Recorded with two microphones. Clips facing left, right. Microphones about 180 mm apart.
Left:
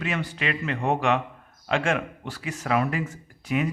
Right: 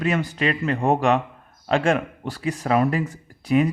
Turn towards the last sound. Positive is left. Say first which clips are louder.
# right 7 dB
turn(degrees=-35)  # may be behind; listen again after turning